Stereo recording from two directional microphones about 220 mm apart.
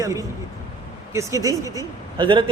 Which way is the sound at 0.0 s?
15° right (ahead or behind).